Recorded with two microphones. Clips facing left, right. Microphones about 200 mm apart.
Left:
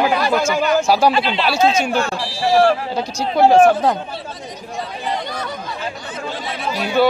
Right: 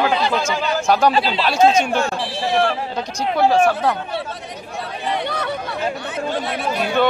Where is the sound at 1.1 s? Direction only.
35° right (ahead or behind).